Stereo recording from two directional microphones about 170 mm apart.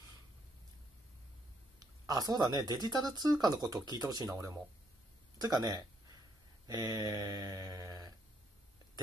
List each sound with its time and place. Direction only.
1.8 s a woman's voice: 20° right (ahead or behind)
5.4 s speech: 25° right (ahead or behind)
6.7 s mantra: 20° right (ahead or behind)